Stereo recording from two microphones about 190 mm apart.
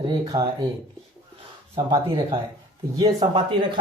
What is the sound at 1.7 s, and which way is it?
Speech, 25° right (ahead or behind).